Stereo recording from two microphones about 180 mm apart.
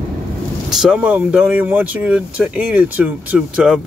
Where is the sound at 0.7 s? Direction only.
5° right (ahead or behind).